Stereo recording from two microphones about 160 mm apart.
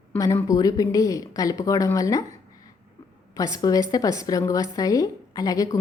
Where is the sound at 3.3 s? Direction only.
20° left (ahead or behind).